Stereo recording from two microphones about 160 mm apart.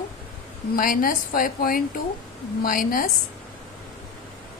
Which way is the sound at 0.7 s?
60° left (ahead or behind).